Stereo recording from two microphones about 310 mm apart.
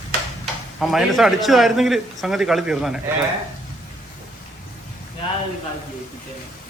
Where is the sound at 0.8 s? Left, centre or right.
Centre.